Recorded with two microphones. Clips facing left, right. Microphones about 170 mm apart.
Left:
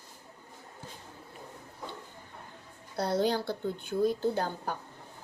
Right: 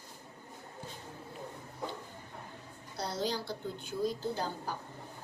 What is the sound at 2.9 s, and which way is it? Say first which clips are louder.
A woman's voice: left 7 dB; 55° left (ahead or behind).